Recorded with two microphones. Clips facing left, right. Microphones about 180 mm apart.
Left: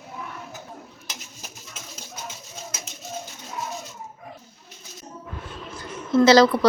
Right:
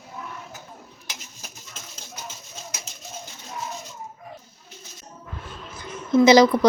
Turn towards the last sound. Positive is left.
turn(degrees=-15)  # may be behind; listen again after turning